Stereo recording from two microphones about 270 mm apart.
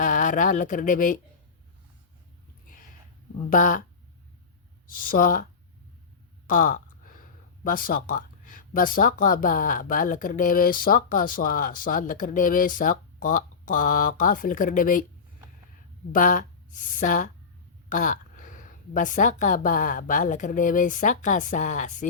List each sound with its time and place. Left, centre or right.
0.0 s speech: left
3.5 s speech: left
4.9 s speech: left
6.5 s speech: left
16.1 s speech: left